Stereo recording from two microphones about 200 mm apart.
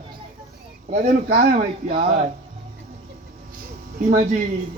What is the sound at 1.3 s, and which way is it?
Speech, 30° right (ahead or behind).